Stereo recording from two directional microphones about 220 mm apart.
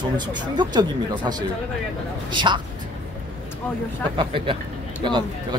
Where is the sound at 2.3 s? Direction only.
20° right (ahead or behind).